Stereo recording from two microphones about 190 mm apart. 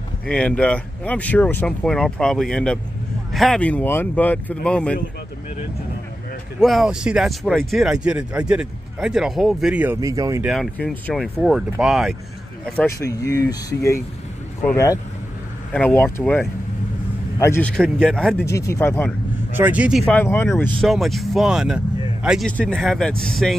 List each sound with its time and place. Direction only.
0.3 s speech: 5° left (ahead or behind)
6.6 s speech: centre (ahead or behind)
9.9 s speech: 20° right (ahead or behind)
10.4 s speech: centre (ahead or behind)
12.7 s speech: 15° left (ahead or behind)
17.7 s speech: 5° left (ahead or behind)
18.4 s speech: 15° left (ahead or behind)
19.5 s speech: 10° right (ahead or behind)